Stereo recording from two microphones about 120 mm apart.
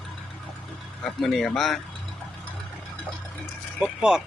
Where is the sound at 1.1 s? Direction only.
Centre (ahead or behind).